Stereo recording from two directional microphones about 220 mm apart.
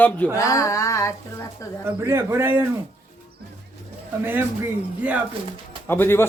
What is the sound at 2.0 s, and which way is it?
Speech, 10° right (ahead or behind).